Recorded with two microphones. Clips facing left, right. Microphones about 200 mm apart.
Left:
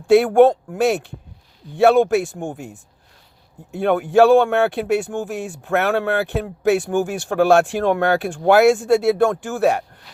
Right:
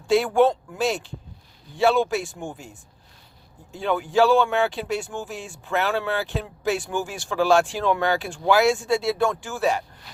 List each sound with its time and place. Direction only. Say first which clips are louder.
0.1 s speech: left 6 dB; 60° left (ahead or behind)